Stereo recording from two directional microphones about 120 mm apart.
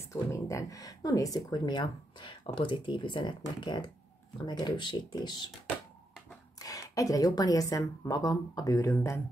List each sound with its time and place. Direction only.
0.1 s speech: 25° left (ahead or behind)
6.6 s a woman's voice: 30° left (ahead or behind)